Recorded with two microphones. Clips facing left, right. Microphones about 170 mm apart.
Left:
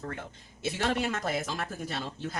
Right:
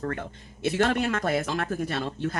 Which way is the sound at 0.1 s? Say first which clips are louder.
Right 6 dB; 60° right (ahead or behind).